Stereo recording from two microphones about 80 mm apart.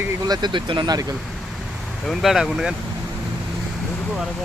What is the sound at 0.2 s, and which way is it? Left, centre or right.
Speech, right.